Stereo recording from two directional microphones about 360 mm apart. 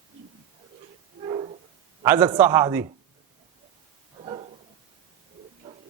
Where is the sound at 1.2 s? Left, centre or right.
Centre.